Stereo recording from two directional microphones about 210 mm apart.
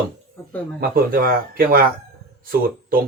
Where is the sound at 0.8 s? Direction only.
45° right (ahead or behind).